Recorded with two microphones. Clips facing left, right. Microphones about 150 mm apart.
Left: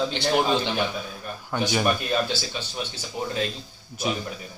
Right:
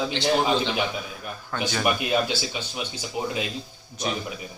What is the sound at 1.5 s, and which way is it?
Speech, 15° left (ahead or behind).